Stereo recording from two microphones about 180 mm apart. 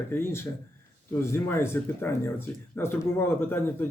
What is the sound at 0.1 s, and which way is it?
A man's voice, 15° left (ahead or behind).